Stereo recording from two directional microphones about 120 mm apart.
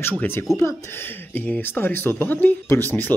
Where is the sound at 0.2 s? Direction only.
20° left (ahead or behind).